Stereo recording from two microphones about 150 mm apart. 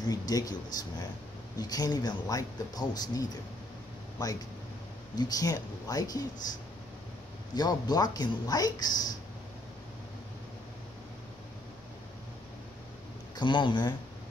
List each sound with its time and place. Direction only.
0.1 s speech: 25° left (ahead or behind)
5.1 s speech: 25° left (ahead or behind)
7.5 s speech: 25° left (ahead or behind)
13.4 s speech: 30° left (ahead or behind)